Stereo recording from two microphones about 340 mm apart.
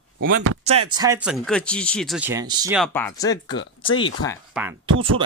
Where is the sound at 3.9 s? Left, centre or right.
Left.